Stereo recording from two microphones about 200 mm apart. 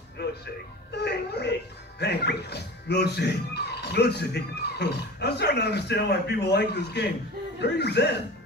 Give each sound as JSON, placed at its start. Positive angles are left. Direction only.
{"t": 0.9, "sound": "speech", "side_deg": 55}